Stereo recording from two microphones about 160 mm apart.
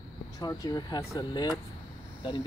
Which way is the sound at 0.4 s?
25° left (ahead or behind).